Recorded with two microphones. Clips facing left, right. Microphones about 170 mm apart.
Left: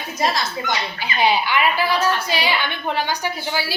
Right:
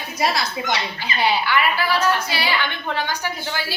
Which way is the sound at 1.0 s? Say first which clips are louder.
Left 4 dB; 15° left (ahead or behind).